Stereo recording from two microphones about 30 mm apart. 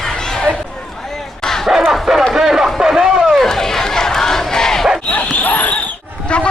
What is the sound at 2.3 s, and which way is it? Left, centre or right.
Music, centre.